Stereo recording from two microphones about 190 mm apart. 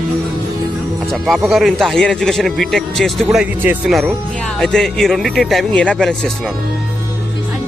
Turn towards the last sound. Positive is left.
turn(degrees=5)  # may be behind; listen again after turning